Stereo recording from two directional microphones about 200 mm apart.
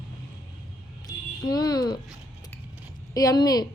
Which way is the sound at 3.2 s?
20° left (ahead or behind).